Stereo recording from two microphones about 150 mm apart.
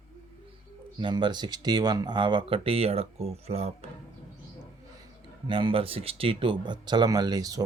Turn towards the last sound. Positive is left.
turn(degrees=-25)  # may be behind; listen again after turning